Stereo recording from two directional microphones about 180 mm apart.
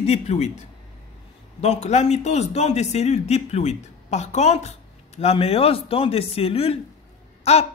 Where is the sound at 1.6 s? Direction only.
35° left (ahead or behind).